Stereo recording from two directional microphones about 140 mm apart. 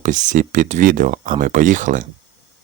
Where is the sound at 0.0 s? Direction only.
65° right (ahead or behind).